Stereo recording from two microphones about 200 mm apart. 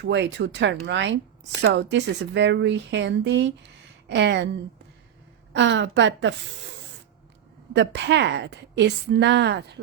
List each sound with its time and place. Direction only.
0.0 s a woman's voice: 65° right (ahead or behind)
5.5 s a woman's voice: 65° right (ahead or behind)
7.7 s a woman's voice: 60° right (ahead or behind)